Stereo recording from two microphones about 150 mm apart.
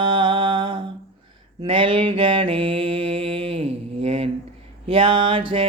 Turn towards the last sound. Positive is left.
turn(degrees=-35)  # may be behind; listen again after turning